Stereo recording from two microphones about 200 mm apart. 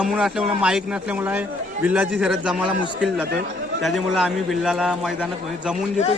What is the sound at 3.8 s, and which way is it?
A man's voice, centre (ahead or behind).